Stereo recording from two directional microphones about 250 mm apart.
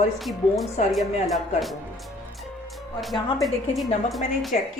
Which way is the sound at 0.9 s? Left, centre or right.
Centre.